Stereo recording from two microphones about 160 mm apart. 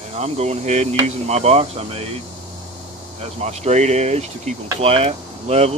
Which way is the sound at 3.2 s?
45° right (ahead or behind).